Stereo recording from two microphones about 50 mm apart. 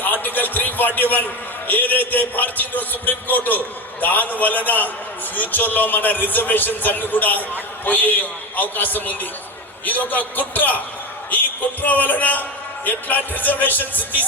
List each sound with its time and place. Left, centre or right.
0.0 s a man's voice: left